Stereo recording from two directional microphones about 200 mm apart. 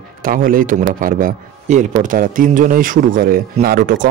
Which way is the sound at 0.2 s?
45° right (ahead or behind).